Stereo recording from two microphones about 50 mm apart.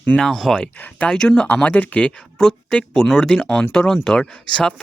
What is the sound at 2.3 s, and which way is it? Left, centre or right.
Speech, centre.